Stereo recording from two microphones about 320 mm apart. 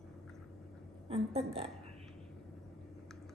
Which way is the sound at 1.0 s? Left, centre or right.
Centre.